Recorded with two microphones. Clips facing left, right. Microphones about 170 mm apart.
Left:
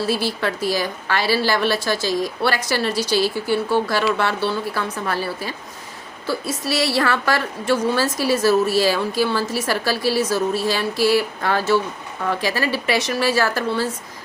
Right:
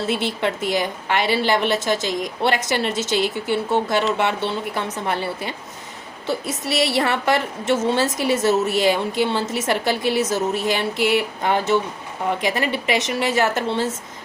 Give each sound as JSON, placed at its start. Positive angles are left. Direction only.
{"t": 0.0, "sound": "a woman's voice", "side_deg": -20}